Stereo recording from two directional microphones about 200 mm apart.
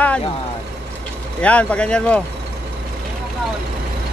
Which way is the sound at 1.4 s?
5° left (ahead or behind).